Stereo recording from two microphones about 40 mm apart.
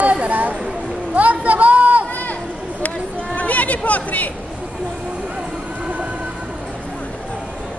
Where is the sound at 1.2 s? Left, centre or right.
Right.